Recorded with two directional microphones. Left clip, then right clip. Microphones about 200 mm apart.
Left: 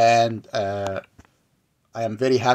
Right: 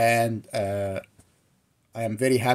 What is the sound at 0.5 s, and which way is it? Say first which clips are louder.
Speech: left 2 dB; 25° right (ahead or behind).